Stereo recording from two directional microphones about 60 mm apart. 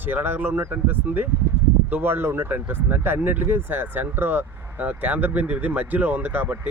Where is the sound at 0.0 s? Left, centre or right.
Right.